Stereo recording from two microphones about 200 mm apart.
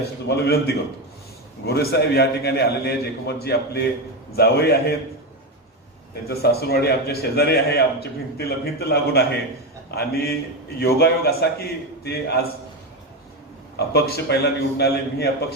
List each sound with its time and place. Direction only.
0.3 s a man's voice: 55° left (ahead or behind)
6.2 s a man's voice: 50° left (ahead or behind)
13.7 s a man's voice: 55° left (ahead or behind)